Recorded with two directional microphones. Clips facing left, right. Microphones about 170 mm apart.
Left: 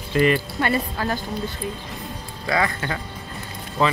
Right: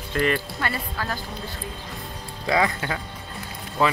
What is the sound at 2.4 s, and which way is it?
Speech, 15° right (ahead or behind).